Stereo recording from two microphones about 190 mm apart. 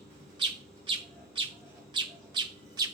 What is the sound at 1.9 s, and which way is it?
Bird, 25° right (ahead or behind).